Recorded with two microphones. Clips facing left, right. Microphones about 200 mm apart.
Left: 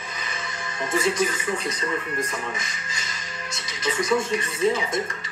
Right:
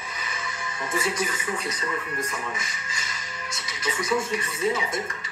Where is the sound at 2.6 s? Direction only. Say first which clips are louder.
Left 1 dB; 10° right (ahead or behind).